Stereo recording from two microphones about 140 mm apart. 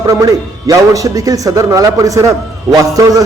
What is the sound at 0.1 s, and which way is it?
A man's voice, 25° right (ahead or behind).